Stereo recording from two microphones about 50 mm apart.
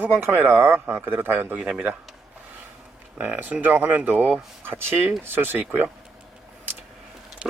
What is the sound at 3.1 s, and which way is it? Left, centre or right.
Speech, right.